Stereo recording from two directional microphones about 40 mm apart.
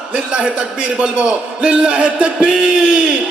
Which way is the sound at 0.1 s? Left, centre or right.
Right.